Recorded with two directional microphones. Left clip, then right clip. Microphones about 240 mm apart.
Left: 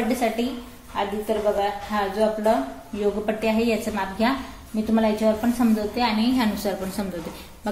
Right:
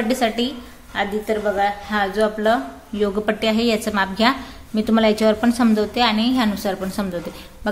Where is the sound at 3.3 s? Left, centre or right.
Right.